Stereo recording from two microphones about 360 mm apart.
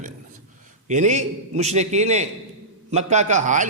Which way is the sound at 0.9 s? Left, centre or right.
Centre.